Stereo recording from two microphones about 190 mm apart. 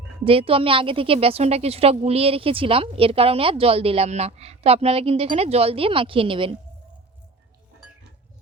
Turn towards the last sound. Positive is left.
turn(degrees=-25)  # may be behind; listen again after turning